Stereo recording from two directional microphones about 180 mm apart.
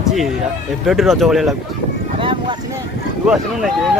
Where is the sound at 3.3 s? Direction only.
Centre (ahead or behind).